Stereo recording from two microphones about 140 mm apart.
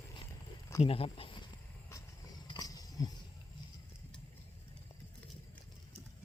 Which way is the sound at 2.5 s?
25° left (ahead or behind).